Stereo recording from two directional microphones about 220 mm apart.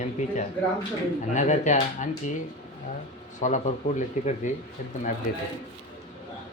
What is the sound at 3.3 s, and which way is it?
Speech, 35° left (ahead or behind).